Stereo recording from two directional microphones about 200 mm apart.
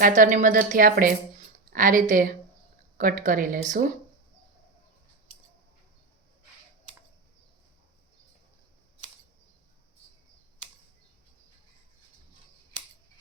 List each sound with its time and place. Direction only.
0.0 s a woman's voice: 40° right (ahead or behind)